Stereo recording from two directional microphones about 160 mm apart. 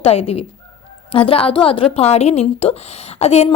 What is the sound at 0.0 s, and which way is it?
A woman's voice, 40° left (ahead or behind).